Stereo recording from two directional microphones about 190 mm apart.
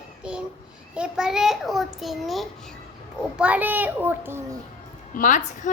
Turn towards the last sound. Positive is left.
turn(degrees=40)  # may be behind; listen again after turning